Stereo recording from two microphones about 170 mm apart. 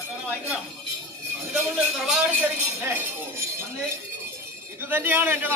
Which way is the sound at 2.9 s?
15° right (ahead or behind).